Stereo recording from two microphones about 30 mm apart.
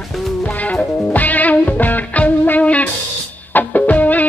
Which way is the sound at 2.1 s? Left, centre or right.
Left.